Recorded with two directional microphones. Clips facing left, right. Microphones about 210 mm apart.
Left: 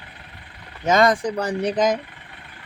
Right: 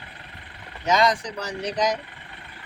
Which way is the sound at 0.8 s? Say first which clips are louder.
Left 4 dB; 50° left (ahead or behind).